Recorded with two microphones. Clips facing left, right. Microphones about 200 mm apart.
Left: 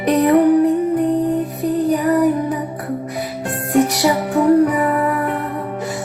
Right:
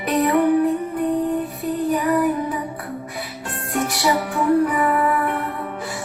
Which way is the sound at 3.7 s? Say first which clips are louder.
Left 6 dB; 40° left (ahead or behind).